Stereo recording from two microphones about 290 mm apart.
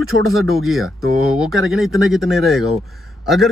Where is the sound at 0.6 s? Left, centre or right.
Centre.